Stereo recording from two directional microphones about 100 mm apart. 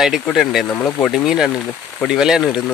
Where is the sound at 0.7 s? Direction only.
20° left (ahead or behind).